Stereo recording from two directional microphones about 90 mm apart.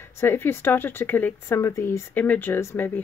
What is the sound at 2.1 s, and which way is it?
Speech, 15° left (ahead or behind).